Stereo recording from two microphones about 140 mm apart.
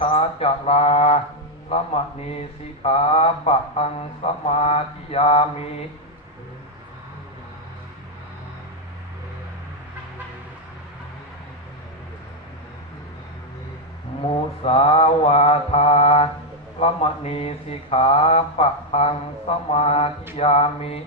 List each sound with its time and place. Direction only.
0.0 s speech: 45° left (ahead or behind)
1.7 s mantra: 45° left (ahead or behind)
14.2 s mantra: 45° left (ahead or behind)